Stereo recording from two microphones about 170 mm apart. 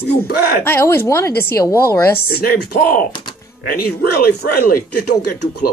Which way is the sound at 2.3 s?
65° left (ahead or behind).